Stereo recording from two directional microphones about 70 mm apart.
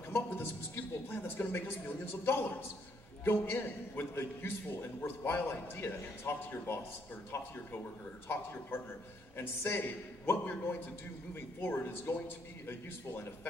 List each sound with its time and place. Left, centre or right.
0.1 s a woman's voice: left
8.3 s a man's voice: left